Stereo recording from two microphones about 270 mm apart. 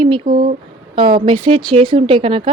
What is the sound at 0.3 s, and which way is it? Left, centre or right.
Speech, right.